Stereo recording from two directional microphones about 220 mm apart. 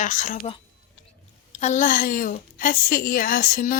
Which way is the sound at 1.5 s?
35° left (ahead or behind).